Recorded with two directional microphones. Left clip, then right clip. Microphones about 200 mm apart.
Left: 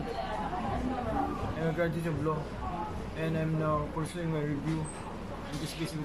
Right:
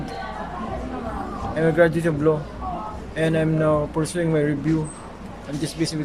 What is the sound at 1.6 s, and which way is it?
A man's voice, 50° right (ahead or behind).